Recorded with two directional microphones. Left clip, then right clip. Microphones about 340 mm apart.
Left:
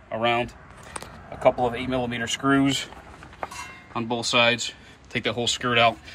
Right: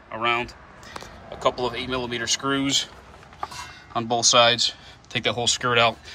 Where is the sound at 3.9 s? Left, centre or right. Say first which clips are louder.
Right 5 dB; centre.